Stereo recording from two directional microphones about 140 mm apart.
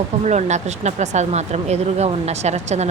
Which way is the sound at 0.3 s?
55° right (ahead or behind).